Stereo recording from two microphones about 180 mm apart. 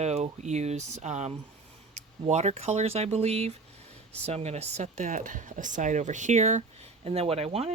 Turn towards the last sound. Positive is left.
turn(degrees=-35)  # may be behind; listen again after turning